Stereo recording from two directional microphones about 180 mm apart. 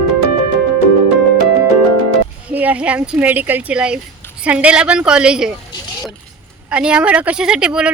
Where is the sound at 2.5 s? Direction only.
10° right (ahead or behind).